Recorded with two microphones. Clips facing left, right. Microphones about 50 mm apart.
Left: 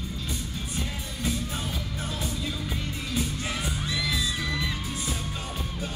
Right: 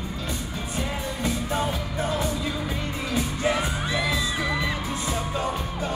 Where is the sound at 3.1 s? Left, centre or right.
Right.